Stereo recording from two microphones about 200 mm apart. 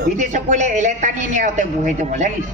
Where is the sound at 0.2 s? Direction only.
35° right (ahead or behind).